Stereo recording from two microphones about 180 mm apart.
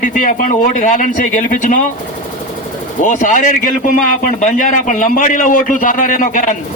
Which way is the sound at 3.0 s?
45° left (ahead or behind).